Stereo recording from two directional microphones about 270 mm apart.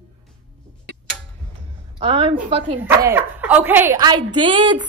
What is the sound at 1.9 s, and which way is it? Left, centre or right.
Speech, right.